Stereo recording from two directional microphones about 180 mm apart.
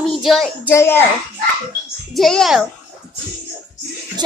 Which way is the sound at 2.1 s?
Centre (ahead or behind).